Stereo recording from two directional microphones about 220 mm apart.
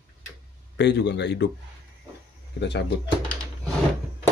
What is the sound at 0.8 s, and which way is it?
Speech, 50° left (ahead or behind).